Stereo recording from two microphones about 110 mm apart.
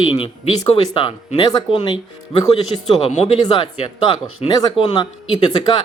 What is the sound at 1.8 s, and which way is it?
A man's voice, 55° left (ahead or behind).